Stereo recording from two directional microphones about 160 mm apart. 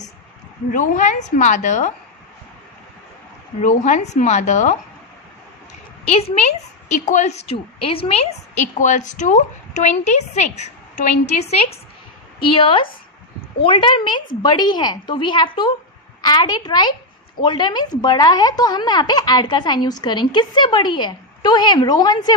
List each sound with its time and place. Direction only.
0.7 s a woman's voice: 55° left (ahead or behind)
3.6 s a woman's voice: 50° left (ahead or behind)
6.1 s a woman's voice: 40° left (ahead or behind)